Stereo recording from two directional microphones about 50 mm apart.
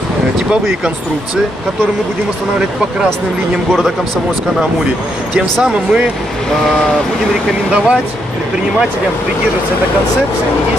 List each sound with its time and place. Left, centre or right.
5.6 s speech: right
7.7 s speech: centre